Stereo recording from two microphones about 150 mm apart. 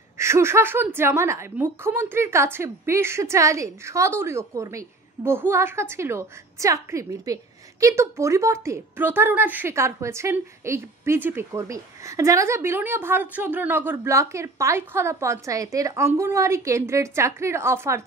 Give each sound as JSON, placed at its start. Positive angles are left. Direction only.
{"t": 0.2, "sound": "a woman's voice", "side_deg": -20}